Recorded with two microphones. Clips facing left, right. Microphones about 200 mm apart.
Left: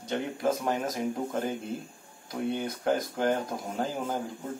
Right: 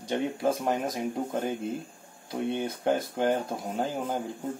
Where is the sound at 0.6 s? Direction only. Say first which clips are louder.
Right 1 dB; 15° right (ahead or behind).